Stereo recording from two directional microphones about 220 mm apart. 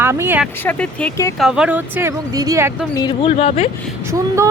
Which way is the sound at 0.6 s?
5° left (ahead or behind).